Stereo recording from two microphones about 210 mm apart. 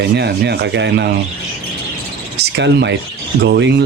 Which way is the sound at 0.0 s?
55° right (ahead or behind).